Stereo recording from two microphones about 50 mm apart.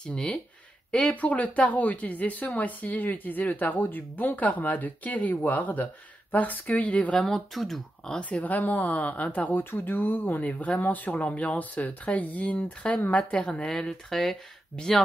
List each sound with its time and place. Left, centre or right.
0.0 s speech: left
7.2 s speech: centre
8.2 s speech: left
13.7 s speech: centre